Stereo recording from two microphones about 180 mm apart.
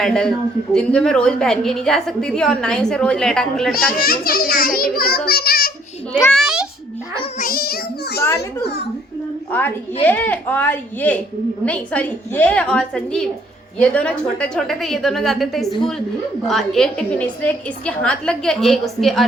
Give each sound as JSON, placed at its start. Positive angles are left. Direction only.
{"t": 0.0, "sound": "a woman's voice", "side_deg": 5}
{"t": 3.9, "sound": "a child's voice", "side_deg": 55}
{"t": 6.3, "sound": "a woman's voice", "side_deg": 0}
{"t": 7.4, "sound": "a child's voice", "side_deg": 55}
{"t": 9.5, "sound": "a woman's voice", "side_deg": 10}